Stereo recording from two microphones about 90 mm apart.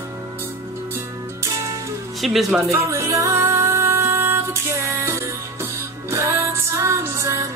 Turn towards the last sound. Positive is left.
turn(degrees=-35)  # may be behind; listen again after turning